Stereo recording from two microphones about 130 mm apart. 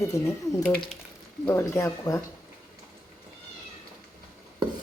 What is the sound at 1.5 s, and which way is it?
Speech, 20° left (ahead or behind).